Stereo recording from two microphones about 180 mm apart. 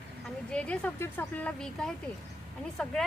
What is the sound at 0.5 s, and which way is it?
A woman's voice, 5° left (ahead or behind).